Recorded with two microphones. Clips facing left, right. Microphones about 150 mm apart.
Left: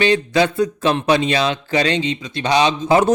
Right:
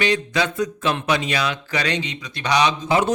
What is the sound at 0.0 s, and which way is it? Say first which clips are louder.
Speech: left 5 dB; 30° left (ahead or behind).